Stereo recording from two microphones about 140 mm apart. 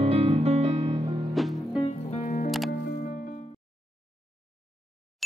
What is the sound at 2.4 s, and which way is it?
Music, centre (ahead or behind).